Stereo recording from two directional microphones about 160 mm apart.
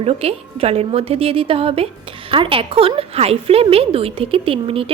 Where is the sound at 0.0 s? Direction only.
40° right (ahead or behind).